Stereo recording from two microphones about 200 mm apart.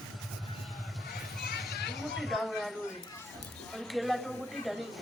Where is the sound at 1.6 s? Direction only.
55° left (ahead or behind).